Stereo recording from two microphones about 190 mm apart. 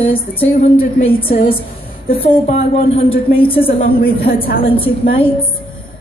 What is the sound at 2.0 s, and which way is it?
A woman's voice, 30° left (ahead or behind).